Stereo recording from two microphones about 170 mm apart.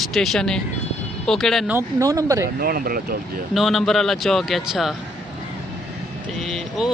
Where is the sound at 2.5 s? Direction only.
60° right (ahead or behind).